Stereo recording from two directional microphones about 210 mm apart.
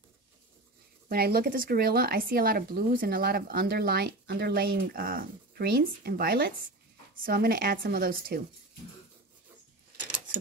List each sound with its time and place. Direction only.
1.0 s speech: 45° right (ahead or behind)